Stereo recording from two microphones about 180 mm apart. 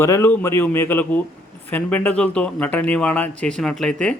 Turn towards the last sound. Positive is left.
turn(degrees=5)  # may be behind; listen again after turning